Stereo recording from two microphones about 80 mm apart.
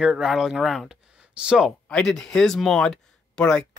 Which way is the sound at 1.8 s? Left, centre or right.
Centre.